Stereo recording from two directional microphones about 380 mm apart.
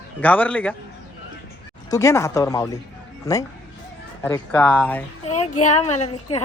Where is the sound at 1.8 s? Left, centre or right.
Centre.